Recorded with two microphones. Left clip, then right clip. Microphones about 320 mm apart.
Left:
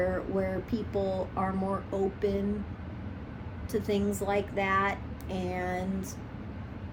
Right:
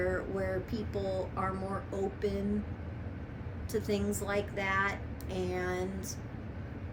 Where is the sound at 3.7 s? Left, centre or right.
Centre.